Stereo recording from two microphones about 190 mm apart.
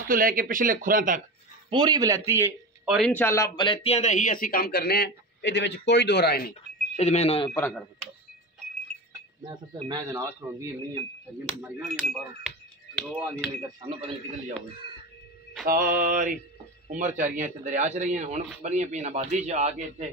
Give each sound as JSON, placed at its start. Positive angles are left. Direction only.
{"t": 0.1, "sound": "speech", "side_deg": -50}
{"t": 1.7, "sound": "speech", "side_deg": -20}
{"t": 3.0, "sound": "speech", "side_deg": 10}
{"t": 7.0, "sound": "speech", "side_deg": 35}
{"t": 7.5, "sound": "speech", "side_deg": 10}
{"t": 9.4, "sound": "speech", "side_deg": -25}
{"t": 11.6, "sound": "speech", "side_deg": 0}
{"t": 13.1, "sound": "speech", "side_deg": -10}
{"t": 13.7, "sound": "speech", "side_deg": -25}
{"t": 15.6, "sound": "speech", "side_deg": -50}